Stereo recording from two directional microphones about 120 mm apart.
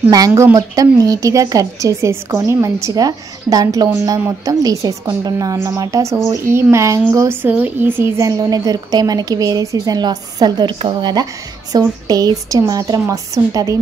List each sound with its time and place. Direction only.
0.1 s speech: 25° right (ahead or behind)
7.4 s speech: 15° right (ahead or behind)
8.2 s a woman's voice: 30° right (ahead or behind)